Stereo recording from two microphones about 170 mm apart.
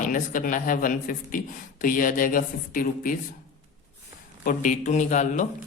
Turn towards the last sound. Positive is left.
turn(degrees=45)  # may be behind; listen again after turning